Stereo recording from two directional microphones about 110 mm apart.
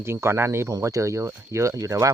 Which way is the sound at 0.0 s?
25° right (ahead or behind).